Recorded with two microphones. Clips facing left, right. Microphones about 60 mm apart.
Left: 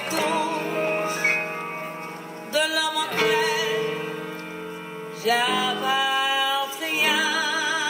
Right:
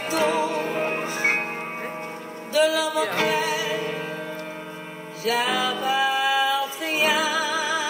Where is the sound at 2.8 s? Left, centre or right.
Right.